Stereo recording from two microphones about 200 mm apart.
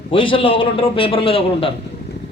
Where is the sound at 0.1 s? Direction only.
25° left (ahead or behind).